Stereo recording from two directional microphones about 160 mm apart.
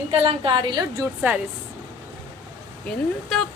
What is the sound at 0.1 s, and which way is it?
Speech, 35° right (ahead or behind).